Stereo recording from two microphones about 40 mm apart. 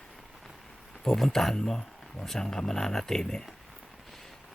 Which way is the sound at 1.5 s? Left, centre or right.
Centre.